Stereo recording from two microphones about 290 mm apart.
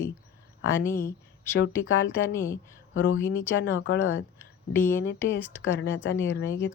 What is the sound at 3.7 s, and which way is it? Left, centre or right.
Speech, left.